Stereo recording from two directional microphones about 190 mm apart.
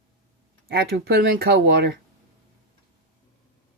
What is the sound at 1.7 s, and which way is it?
Speech, 65° right (ahead or behind).